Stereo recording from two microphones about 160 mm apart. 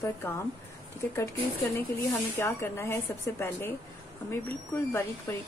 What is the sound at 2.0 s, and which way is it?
Speech, 15° left (ahead or behind).